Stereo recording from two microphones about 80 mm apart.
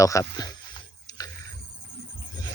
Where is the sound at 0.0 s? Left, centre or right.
Left.